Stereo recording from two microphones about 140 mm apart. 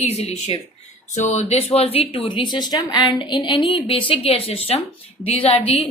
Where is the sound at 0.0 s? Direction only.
50° left (ahead or behind).